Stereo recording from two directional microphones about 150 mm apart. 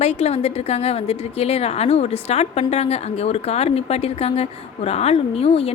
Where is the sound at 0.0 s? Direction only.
45° left (ahead or behind).